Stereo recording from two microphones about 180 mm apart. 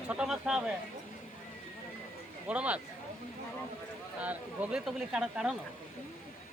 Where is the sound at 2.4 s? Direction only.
5° right (ahead or behind).